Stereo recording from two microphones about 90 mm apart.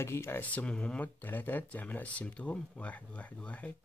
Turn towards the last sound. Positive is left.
turn(degrees=15)  # may be behind; listen again after turning